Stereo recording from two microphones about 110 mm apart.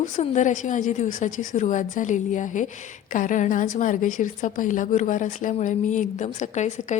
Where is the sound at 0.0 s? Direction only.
90° left.